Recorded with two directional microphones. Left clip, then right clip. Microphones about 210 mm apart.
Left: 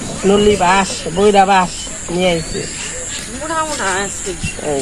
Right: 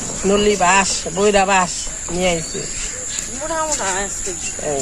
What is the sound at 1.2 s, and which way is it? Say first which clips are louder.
Speech: left 4 dB; 15° right (ahead or behind).